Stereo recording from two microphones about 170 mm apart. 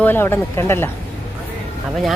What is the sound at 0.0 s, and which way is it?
Speech, 10° left (ahead or behind).